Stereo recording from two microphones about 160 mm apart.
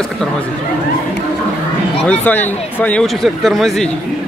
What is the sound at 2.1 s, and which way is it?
Speech, 10° left (ahead or behind).